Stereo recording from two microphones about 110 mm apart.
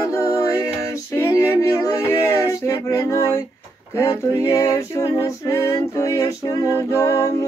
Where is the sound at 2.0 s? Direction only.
25° left (ahead or behind).